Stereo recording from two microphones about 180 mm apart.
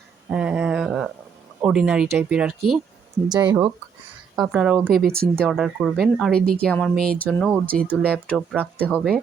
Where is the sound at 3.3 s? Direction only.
20° right (ahead or behind).